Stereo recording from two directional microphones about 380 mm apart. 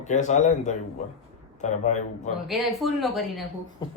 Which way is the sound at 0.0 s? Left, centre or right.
Centre.